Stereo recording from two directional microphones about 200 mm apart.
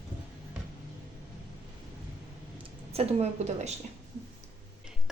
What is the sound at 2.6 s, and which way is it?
A woman's voice, 30° right (ahead or behind).